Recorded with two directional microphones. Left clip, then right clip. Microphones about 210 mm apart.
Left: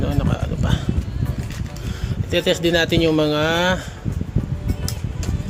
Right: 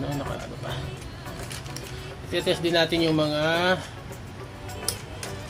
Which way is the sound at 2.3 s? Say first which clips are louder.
Left 6 dB; 45° left (ahead or behind).